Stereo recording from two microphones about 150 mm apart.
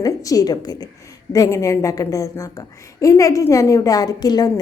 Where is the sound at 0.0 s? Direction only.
25° left (ahead or behind).